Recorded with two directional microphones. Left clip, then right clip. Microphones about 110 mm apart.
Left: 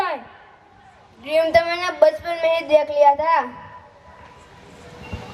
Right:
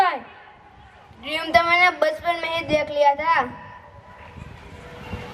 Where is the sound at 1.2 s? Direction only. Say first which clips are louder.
Left 2 dB; 20° right (ahead or behind).